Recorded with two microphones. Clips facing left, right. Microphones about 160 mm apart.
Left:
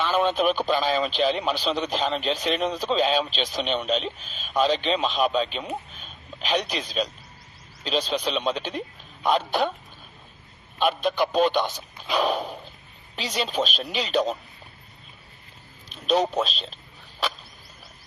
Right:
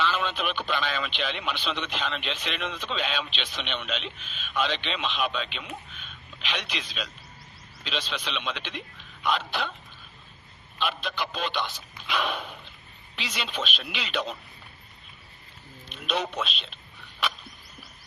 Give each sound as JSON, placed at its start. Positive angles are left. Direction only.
{"t": 0.0, "sound": "a man's voice", "side_deg": 45}
{"t": 10.8, "sound": "a man's voice", "side_deg": 50}
{"t": 15.9, "sound": "speech", "side_deg": 35}